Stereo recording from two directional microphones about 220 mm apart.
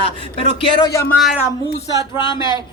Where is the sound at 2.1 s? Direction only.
20° left (ahead or behind).